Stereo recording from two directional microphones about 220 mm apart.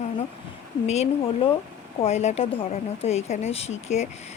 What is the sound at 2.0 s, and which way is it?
Speech, 30° left (ahead or behind).